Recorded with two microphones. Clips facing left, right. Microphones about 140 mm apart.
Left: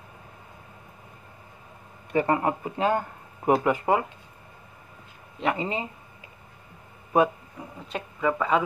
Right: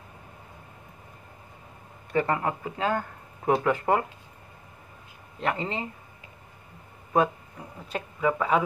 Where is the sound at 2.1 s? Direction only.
20° left (ahead or behind).